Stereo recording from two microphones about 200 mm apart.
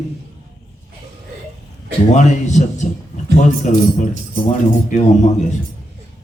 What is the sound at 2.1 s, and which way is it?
A man's voice, 35° left (ahead or behind).